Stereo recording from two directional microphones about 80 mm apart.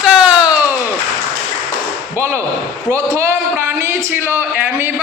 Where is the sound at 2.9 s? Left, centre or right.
Right.